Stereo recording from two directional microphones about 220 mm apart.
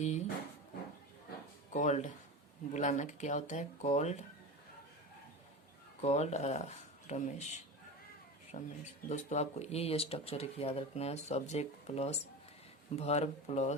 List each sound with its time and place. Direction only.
0.0 s drawer open or close: 30° left (ahead or behind)
1.7 s speech: 35° left (ahead or behind)
6.0 s speech: 30° left (ahead or behind)